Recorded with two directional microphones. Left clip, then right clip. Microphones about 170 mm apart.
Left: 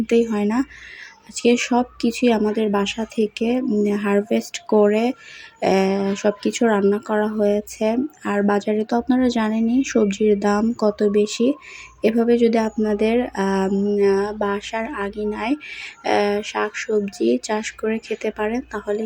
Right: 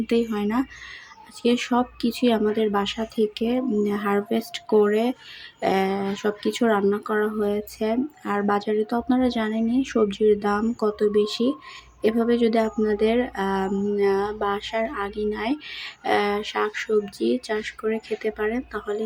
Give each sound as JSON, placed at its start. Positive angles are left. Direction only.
{"t": 0.1, "sound": "speech", "side_deg": 15}